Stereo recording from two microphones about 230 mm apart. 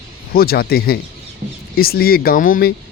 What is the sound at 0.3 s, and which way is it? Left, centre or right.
Speech, left.